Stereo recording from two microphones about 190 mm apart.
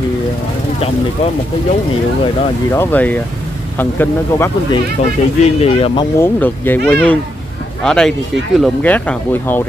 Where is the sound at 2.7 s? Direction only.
10° left (ahead or behind).